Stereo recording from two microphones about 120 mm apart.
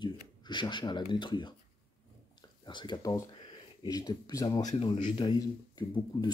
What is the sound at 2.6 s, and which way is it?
Speech, 40° left (ahead or behind).